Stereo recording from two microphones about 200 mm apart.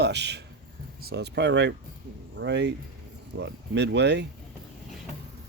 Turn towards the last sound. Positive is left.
turn(degrees=-60)  # may be behind; listen again after turning